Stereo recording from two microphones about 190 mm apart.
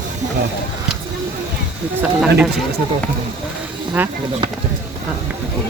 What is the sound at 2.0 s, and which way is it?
Speech, 5° right (ahead or behind).